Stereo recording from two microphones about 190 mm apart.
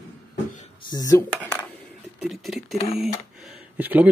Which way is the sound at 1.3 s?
5° left (ahead or behind).